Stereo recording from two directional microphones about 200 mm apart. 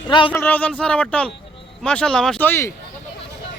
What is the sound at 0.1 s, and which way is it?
Speech, 25° left (ahead or behind).